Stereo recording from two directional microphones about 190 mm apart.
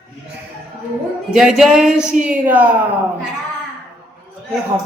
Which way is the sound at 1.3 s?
5° right (ahead or behind).